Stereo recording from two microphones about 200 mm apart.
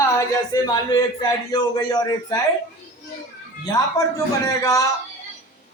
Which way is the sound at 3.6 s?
15° left (ahead or behind).